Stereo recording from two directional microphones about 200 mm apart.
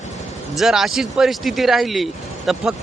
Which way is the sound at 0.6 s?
Centre (ahead or behind).